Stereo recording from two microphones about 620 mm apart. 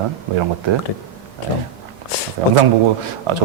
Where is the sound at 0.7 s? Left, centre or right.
Right.